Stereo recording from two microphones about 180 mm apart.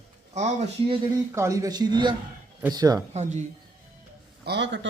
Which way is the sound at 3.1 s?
40° right (ahead or behind).